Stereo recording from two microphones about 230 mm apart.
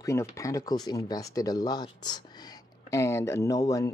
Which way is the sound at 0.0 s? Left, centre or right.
Centre.